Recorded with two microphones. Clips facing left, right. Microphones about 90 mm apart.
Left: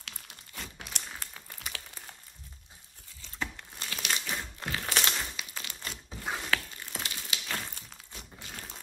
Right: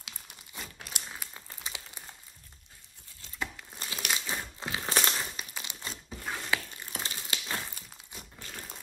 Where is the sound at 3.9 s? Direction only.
20° right (ahead or behind).